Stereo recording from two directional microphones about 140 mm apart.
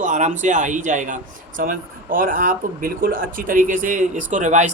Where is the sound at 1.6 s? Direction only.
80° right.